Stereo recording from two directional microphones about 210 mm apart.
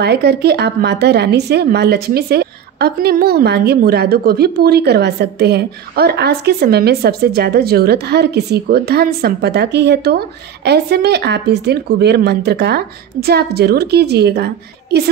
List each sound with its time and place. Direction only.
0.0 s speech: 50° right (ahead or behind)